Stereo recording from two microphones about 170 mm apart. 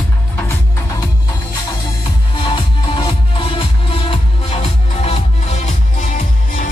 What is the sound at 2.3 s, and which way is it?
Music, 30° left (ahead or behind).